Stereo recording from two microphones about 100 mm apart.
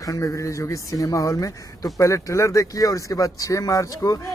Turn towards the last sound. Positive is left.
turn(degrees=35)  # may be behind; listen again after turning